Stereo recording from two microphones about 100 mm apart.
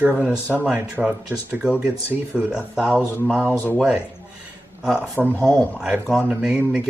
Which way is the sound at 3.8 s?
10° right (ahead or behind).